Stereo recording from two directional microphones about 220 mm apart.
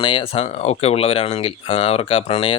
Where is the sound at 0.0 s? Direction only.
25° left (ahead or behind).